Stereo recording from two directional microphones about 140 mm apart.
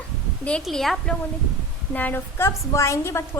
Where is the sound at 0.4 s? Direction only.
5° left (ahead or behind).